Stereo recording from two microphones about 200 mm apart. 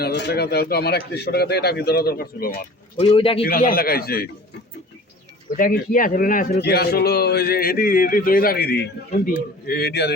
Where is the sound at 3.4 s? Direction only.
45° left (ahead or behind).